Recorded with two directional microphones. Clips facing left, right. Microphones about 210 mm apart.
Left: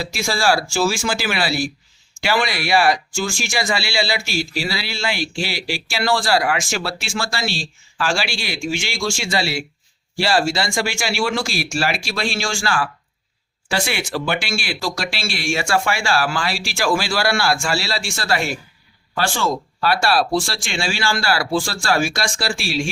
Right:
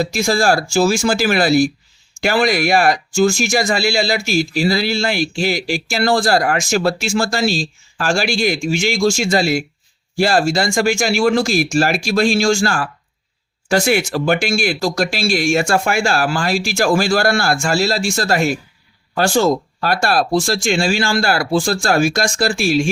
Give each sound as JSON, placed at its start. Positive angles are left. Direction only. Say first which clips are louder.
{"t": 0.0, "sound": "speech", "louder": "right 5 dB", "side_deg": -40}